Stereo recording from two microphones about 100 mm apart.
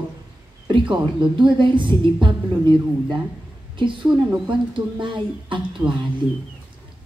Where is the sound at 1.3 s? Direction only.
55° right (ahead or behind).